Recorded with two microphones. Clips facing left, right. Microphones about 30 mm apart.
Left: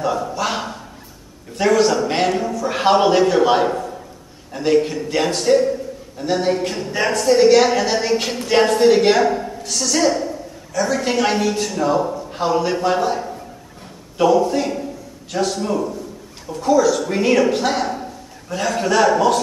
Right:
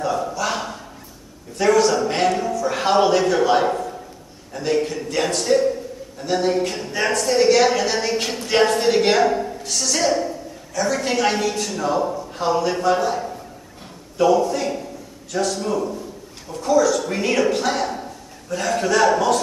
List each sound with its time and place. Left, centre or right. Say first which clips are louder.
0.4 s a sound: left 2 dB; centre
1.6 s a man's voice: left 1 dB; centre
15.3 s a man's voice: left 2 dB; centre